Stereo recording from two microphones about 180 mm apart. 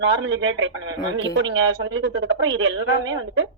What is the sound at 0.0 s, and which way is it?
A man's voice, 80° right.